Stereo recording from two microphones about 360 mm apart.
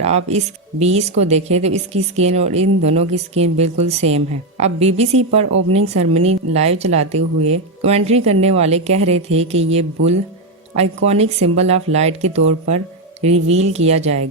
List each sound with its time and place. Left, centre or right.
0.3 s a woman's voice: centre
5.5 s speech: right
6.0 s a woman's voice: centre